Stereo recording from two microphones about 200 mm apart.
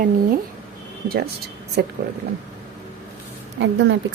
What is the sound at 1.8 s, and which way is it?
Speech, 55° right (ahead or behind).